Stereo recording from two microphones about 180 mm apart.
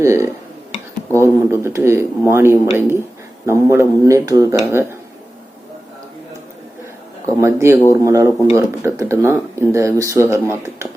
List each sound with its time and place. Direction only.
0.0 s speech: 15° right (ahead or behind)
7.4 s speech: 15° right (ahead or behind)